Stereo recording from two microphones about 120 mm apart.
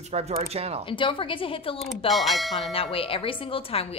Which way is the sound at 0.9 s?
45° left (ahead or behind).